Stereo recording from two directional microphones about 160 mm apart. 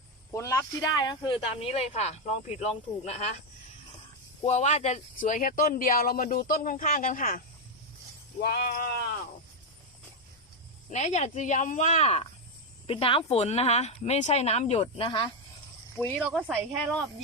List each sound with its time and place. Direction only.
0.3 s speech: 20° left (ahead or behind); by 3.3 s 45° left (ahead or behind)
4.4 s speech: 45° left (ahead or behind)
8.4 s speech: 75° left (ahead or behind)
10.8 s speech: 50° left (ahead or behind); by 15.3 s 30° left (ahead or behind)
16.2 s speech: 10° right (ahead or behind)